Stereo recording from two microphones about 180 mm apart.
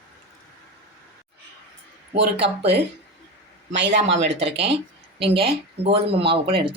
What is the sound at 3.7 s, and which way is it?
Speech, 80° right.